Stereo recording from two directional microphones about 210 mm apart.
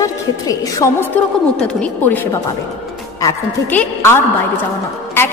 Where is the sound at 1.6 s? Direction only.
5° left (ahead or behind).